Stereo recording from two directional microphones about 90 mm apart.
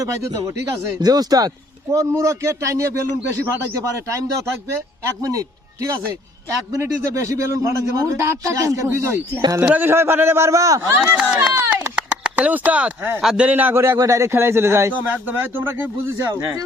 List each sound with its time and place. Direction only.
0.0 s speech: 35° right (ahead or behind)
1.9 s a man's voice: 35° right (ahead or behind)
10.8 s a man's voice: 25° right (ahead or behind)
11.9 s a man's voice: 15° right (ahead or behind); by 16.6 s 40° right (ahead or behind)